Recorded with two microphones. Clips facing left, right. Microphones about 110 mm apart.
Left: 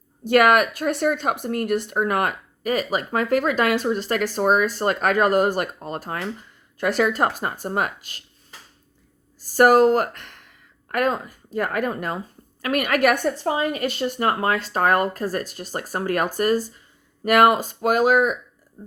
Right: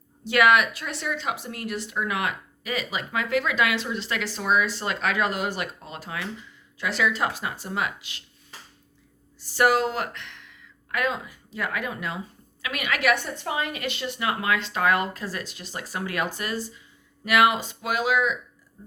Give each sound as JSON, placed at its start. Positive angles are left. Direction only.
{"t": 0.3, "sound": "speech", "side_deg": 50}
{"t": 9.4, "sound": "speech", "side_deg": 45}